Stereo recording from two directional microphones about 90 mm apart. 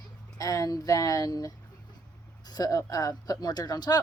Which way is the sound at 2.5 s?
45° left (ahead or behind).